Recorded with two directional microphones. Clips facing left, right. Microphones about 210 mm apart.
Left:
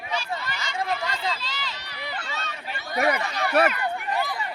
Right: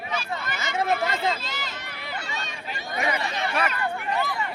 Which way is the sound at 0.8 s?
50° right (ahead or behind).